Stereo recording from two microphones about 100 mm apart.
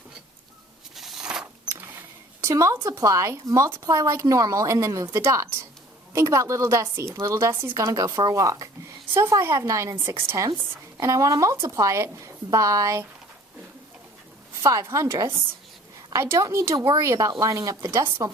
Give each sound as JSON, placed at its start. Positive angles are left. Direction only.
{"t": 0.9, "sound": "a sound", "side_deg": -5}
{"t": 2.4, "sound": "a woman's voice", "side_deg": -30}
{"t": 14.6, "sound": "a woman's voice", "side_deg": -30}